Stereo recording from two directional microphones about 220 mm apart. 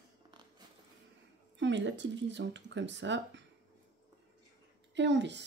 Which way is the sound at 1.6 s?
55° right (ahead or behind).